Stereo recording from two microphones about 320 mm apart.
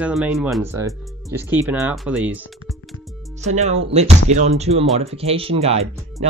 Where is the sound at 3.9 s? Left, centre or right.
Right.